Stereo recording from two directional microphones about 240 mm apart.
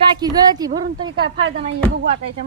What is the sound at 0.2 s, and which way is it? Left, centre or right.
A woman's voice, centre.